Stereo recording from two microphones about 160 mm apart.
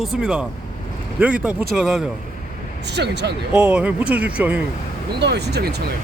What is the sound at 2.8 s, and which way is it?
Speech, 90° right.